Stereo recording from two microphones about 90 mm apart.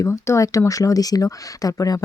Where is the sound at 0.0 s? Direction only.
35° left (ahead or behind).